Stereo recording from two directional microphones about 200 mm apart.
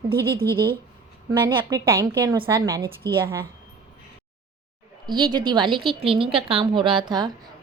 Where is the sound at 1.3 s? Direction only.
20° right (ahead or behind).